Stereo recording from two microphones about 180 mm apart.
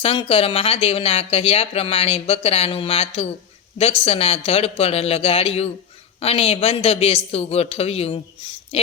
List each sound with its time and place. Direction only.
0.0 s speech: 30° left (ahead or behind)